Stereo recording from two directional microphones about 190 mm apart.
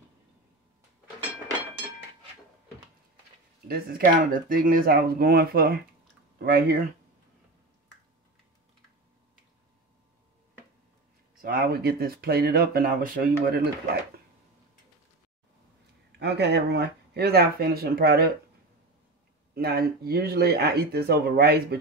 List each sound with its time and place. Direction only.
3.6 s speech: 50° right (ahead or behind)
11.4 s speech: 55° right (ahead or behind)
16.1 s speech: 65° right (ahead or behind)
19.5 s speech: 55° right (ahead or behind)